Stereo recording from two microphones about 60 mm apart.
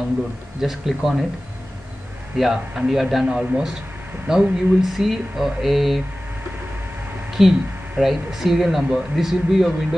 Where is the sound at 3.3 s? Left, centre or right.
Centre.